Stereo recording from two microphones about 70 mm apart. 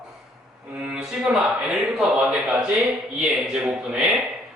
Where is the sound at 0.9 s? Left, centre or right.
Centre.